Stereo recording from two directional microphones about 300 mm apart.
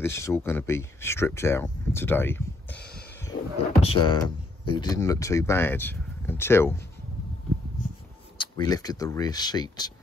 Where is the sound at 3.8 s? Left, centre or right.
Centre.